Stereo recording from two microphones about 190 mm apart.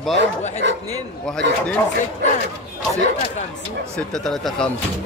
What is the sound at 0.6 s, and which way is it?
Speech, 70° right (ahead or behind).